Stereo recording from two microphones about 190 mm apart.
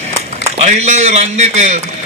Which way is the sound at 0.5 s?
35° right (ahead or behind).